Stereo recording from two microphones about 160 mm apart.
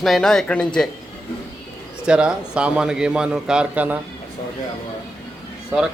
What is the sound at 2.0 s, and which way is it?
A man's voice, 5° right (ahead or behind).